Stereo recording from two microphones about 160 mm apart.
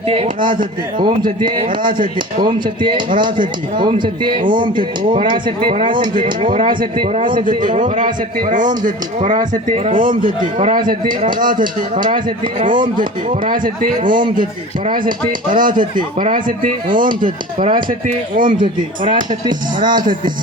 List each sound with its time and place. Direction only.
0.1 s speech: 35° right (ahead or behind)
0.5 s a man's voice: 60° right (ahead or behind)
1.4 s speech: 30° right (ahead or behind)
7.3 s a man's voice: 60° right (ahead or behind)
15.3 s a man's voice: 60° right (ahead or behind)
17.6 s speech: 30° right (ahead or behind)
18.3 s a man's voice: 60° right (ahead or behind)